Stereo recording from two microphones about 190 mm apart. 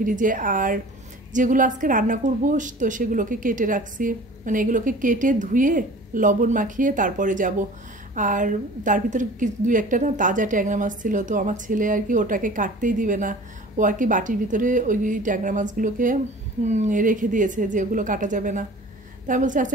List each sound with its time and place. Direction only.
0.0 s a woman's voice: 45° right (ahead or behind)